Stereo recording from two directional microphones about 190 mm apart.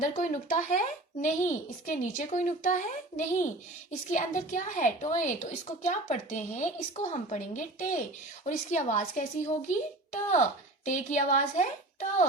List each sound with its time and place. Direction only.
0.0 s a woman's voice: 40° left (ahead or behind)